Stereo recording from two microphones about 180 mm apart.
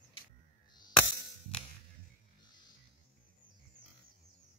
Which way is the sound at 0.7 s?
25° left (ahead or behind).